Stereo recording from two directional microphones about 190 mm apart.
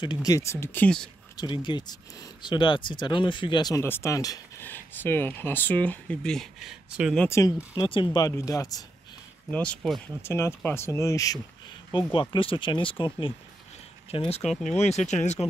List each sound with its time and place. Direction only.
0.0 s speech: 20° left (ahead or behind); by 1.1 s 5° left (ahead or behind)
1.3 s speech: 25° left (ahead or behind); by 7.2 s 5° right (ahead or behind)
7.2 s speech: 15° left (ahead or behind)
9.5 s speech: 5° left (ahead or behind)
12.1 s speech: 25° left (ahead or behind)
14.5 s speech: centre (ahead or behind)
14.8 s speech: 35° left (ahead or behind)